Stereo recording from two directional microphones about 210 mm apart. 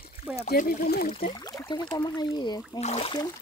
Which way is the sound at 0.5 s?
40° left (ahead or behind).